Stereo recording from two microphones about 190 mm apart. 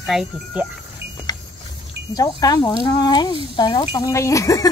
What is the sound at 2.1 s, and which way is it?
Speech, 20° left (ahead or behind).